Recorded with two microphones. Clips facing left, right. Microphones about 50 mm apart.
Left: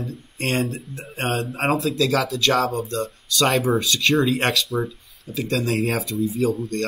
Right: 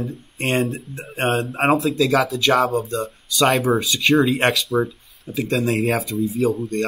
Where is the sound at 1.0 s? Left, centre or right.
Right.